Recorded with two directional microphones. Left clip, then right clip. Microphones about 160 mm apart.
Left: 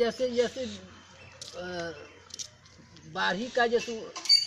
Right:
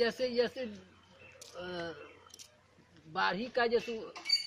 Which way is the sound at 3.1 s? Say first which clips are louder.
Left 3 dB; 20° right (ahead or behind).